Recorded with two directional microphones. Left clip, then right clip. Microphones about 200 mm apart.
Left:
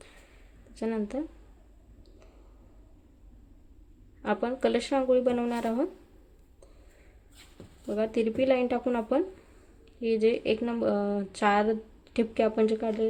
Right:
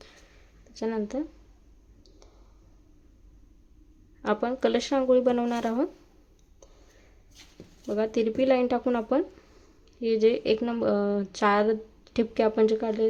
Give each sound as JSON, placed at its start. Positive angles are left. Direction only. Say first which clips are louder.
{"t": 0.7, "sound": "speech", "louder": "right 2 dB", "side_deg": -5}
{"t": 4.2, "sound": "speech", "louder": "right 2 dB", "side_deg": -10}
{"t": 7.9, "sound": "speech", "louder": "right 2 dB", "side_deg": -10}